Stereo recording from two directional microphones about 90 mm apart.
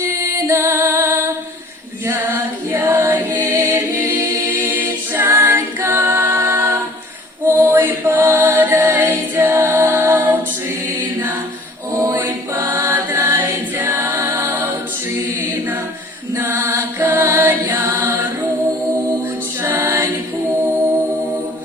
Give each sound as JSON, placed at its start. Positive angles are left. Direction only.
{"t": 0.1, "sound": "music", "side_deg": -30}
{"t": 7.4, "sound": "a capella", "side_deg": -25}
{"t": 10.8, "sound": "music", "side_deg": -25}
{"t": 11.9, "sound": "choir", "side_deg": -30}
{"t": 15.4, "sound": "mantra", "side_deg": -25}
{"t": 16.3, "sound": "music", "side_deg": -25}
{"t": 19.6, "sound": "music", "side_deg": -25}